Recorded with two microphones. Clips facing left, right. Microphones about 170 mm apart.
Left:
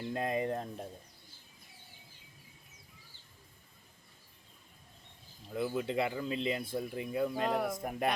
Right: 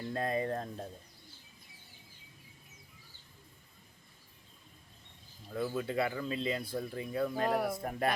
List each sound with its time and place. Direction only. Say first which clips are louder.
0.1 s speech: even; 15° left (ahead or behind)
5.5 s speech: even; 15° left (ahead or behind)
7.4 s speech: right 1 dB; 5° right (ahead or behind)
7.8 s speech: even; 15° left (ahead or behind)